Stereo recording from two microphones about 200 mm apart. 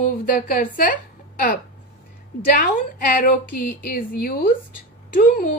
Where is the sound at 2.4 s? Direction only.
45° left (ahead or behind).